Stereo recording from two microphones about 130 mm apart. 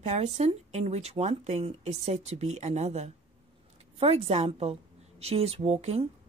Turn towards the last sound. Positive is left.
turn(degrees=-55)  # may be behind; listen again after turning